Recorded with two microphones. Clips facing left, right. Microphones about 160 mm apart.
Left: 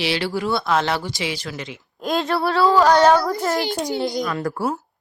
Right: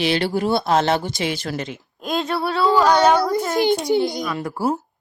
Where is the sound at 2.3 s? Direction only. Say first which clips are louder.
Left 1 dB; centre (ahead or behind).